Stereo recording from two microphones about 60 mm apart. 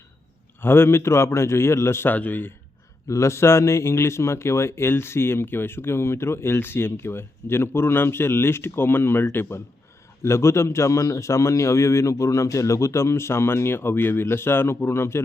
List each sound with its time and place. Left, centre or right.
0.6 s a man's voice: left
2.0 s speech: left
3.1 s a man's voice: left
10.2 s a man's voice: left